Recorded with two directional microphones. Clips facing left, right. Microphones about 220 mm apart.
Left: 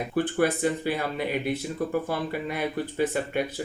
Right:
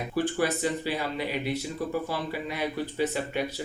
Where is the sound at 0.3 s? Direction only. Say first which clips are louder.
Left 3 dB; 55° left (ahead or behind).